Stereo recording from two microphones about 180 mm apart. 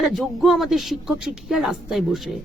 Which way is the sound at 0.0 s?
Centre (ahead or behind).